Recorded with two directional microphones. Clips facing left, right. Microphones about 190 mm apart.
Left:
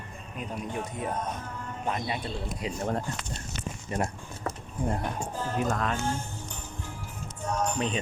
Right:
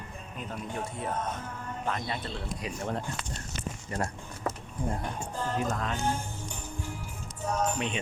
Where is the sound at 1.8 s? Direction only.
15° left (ahead or behind).